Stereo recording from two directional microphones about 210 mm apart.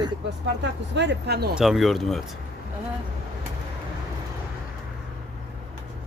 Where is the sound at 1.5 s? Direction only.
Centre (ahead or behind).